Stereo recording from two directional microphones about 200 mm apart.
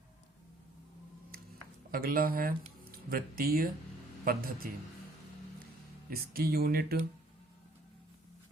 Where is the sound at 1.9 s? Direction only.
45° right (ahead or behind).